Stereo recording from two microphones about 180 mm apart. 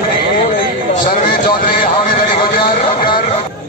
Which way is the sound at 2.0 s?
50° left (ahead or behind).